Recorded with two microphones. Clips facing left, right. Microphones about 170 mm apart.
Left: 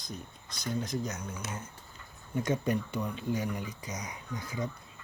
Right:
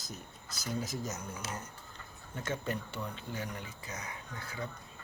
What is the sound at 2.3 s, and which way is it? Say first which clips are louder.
Speech: left 7 dB; 15° left (ahead or behind).